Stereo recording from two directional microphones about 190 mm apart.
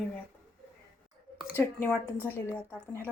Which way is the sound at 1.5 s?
10° left (ahead or behind).